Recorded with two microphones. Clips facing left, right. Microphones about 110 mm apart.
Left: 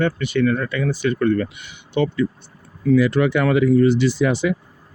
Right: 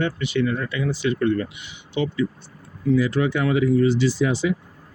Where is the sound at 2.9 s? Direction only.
70° left (ahead or behind).